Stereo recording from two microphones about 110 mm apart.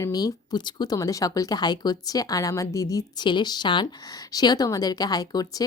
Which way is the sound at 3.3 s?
45° left (ahead or behind).